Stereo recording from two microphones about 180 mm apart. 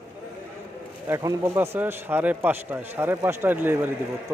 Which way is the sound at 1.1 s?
15° right (ahead or behind).